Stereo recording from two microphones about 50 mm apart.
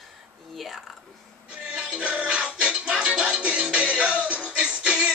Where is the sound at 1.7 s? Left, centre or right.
Right.